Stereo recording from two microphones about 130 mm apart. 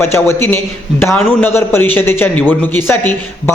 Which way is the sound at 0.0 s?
20° left (ahead or behind).